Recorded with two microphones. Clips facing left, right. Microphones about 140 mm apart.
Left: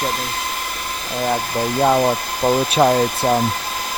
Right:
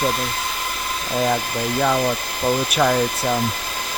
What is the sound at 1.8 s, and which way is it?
Speech, 30° left (ahead or behind).